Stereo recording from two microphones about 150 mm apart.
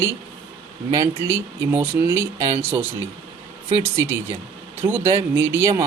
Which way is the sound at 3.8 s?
15° right (ahead or behind).